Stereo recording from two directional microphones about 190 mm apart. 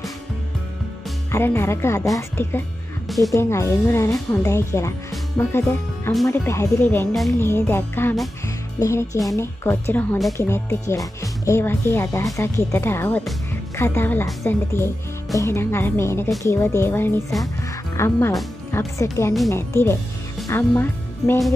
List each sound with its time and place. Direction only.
1.3 s a woman's voice: 10° left (ahead or behind)
3.1 s music: centre (ahead or behind)
3.3 s a woman's voice: 15° left (ahead or behind)